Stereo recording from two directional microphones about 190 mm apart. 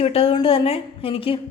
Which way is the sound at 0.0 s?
30° left (ahead or behind).